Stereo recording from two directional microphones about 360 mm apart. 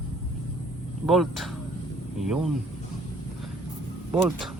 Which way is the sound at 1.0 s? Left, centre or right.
Centre.